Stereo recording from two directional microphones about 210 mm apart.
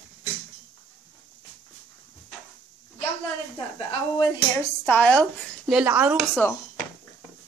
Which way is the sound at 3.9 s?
20° left (ahead or behind).